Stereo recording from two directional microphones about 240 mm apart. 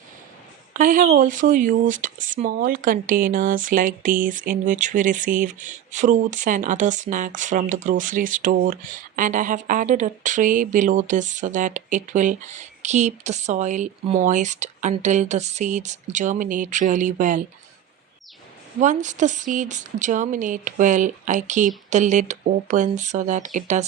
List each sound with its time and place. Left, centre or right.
0.7 s speech: right
18.8 s speech: right